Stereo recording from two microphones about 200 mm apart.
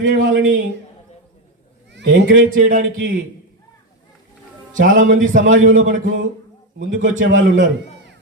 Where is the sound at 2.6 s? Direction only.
45° right (ahead or behind).